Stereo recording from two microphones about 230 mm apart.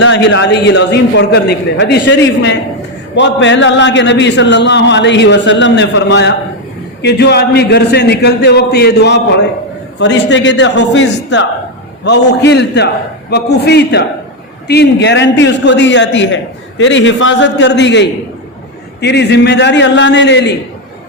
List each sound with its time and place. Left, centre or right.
0.0 s a man's voice: left